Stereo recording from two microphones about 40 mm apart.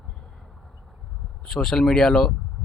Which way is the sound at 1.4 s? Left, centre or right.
Centre.